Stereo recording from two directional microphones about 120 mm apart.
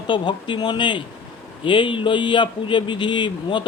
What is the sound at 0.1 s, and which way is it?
Speech, 40° left (ahead or behind).